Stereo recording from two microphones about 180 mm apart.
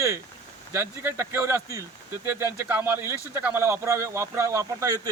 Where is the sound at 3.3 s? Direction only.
10° right (ahead or behind).